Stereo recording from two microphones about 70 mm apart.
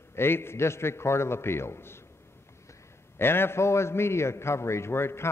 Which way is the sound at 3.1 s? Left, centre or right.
Left.